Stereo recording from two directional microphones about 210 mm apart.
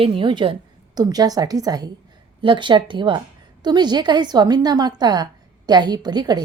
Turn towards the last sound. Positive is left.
turn(degrees=-20)  # may be behind; listen again after turning